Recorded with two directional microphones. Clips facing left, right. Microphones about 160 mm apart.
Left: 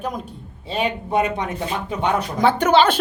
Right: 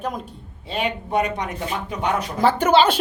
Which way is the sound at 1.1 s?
25° left (ahead or behind).